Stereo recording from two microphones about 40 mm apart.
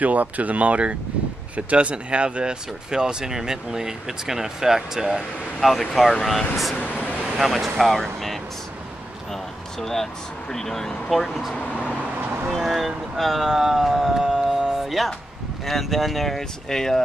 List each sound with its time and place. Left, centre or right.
0.0 s speech: right; by 5.2 s centre
5.6 s speech: centre
6.8 s vehicle: left
7.3 s speech: centre
9.3 s a sound: centre
10.5 s speech: centre
12.4 s vehicle: centre
13.5 s speech: centre
14.6 s music: centre
15.6 s speech: centre